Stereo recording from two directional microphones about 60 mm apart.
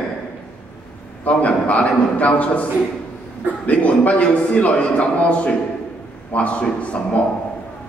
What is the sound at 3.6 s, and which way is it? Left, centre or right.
A man's voice, left.